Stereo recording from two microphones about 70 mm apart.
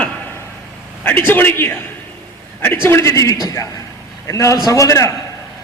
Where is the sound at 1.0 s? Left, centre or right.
Left.